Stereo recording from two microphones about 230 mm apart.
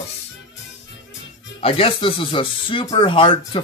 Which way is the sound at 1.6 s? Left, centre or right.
Left.